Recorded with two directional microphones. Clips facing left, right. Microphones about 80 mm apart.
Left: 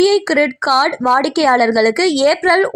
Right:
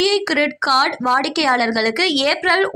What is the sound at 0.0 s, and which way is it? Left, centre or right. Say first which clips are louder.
Speech: left 5 dB; left.